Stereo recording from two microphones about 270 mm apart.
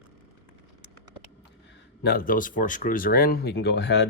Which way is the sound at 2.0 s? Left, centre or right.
Left.